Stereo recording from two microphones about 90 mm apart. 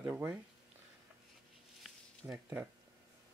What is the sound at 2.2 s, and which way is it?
Speech, 20° right (ahead or behind).